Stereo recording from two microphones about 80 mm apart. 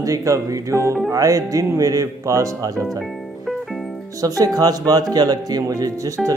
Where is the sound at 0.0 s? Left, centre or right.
Right.